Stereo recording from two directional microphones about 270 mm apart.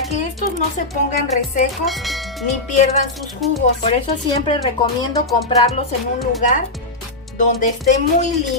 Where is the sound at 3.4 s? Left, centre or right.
Centre.